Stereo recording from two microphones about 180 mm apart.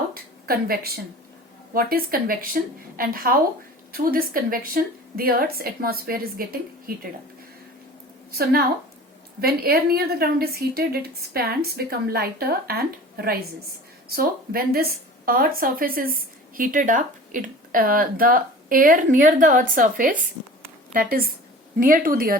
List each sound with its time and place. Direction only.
0.1 s a sound: 55° right (ahead or behind)
1.7 s a woman's voice: 55° right (ahead or behind)
8.3 s a woman's voice: 60° right (ahead or behind)